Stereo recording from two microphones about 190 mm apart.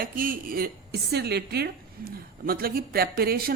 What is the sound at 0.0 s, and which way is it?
Speech, 50° right (ahead or behind).